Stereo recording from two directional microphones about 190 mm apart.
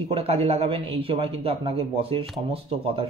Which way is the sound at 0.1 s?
30° right (ahead or behind).